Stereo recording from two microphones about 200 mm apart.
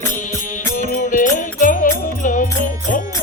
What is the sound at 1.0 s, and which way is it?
Music, 40° left (ahead or behind).